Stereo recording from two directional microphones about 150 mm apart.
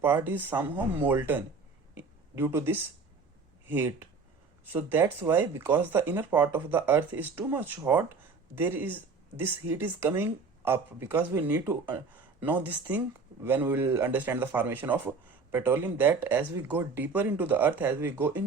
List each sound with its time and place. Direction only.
0.0 s speech: 15° right (ahead or behind)